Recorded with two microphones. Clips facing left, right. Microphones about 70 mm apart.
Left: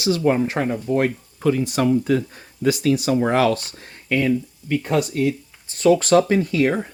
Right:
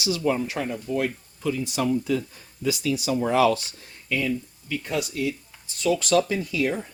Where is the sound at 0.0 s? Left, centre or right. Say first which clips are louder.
Left 6 dB; left.